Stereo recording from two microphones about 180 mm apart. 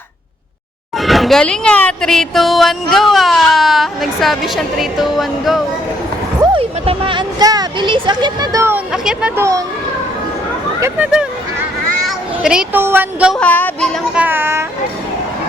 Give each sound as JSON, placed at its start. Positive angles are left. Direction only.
{"t": 0.9, "sound": "speech", "side_deg": 0}
{"t": 6.4, "sound": "speech", "side_deg": -30}
{"t": 10.8, "sound": "speech", "side_deg": -10}
{"t": 13.4, "sound": "speech", "side_deg": 10}
{"t": 14.2, "sound": "a child's voice", "side_deg": -10}